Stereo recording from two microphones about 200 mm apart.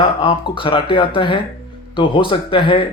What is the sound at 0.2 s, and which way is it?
Speech, 25° left (ahead or behind).